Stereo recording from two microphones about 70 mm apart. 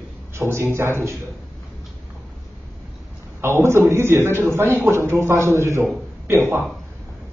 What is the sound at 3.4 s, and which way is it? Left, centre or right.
A man's voice, right.